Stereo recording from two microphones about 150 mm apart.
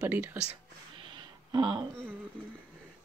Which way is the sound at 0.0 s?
10° right (ahead or behind).